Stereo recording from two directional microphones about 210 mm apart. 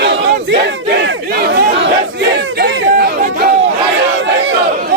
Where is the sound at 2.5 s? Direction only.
50° right (ahead or behind).